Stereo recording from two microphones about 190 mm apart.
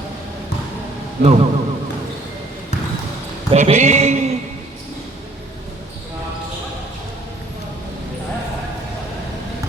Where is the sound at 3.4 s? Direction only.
35° right (ahead or behind).